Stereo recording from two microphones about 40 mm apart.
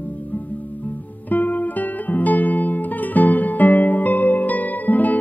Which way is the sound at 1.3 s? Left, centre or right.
Left.